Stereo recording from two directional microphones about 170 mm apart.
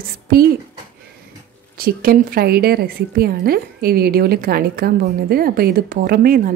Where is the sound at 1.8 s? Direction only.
60° right (ahead or behind).